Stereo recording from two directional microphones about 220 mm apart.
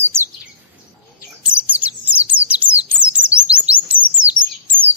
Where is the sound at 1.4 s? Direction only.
5° right (ahead or behind).